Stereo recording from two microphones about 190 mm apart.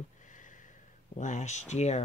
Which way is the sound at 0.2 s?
40° left (ahead or behind).